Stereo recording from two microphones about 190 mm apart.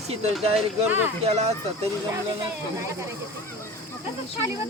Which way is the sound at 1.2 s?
35° right (ahead or behind).